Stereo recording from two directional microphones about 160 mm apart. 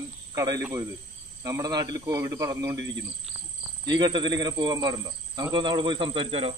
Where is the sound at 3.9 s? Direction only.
25° right (ahead or behind).